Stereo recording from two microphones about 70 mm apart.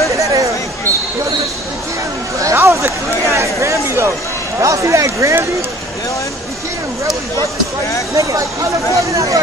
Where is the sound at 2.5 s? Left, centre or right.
Right.